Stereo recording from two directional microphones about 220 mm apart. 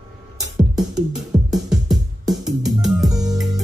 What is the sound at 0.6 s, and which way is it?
Music, centre (ahead or behind).